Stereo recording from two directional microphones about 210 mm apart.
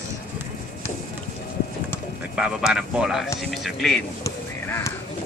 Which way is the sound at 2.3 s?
5° right (ahead or behind).